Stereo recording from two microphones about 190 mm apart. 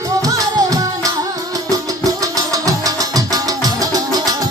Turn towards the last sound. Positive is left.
turn(degrees=-20)  # may be behind; listen again after turning